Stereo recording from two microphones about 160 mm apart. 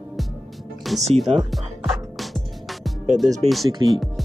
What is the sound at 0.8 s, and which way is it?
Speech, centre (ahead or behind).